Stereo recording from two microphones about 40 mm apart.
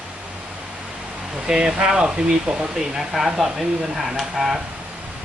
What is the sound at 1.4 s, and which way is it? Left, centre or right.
Speech, centre.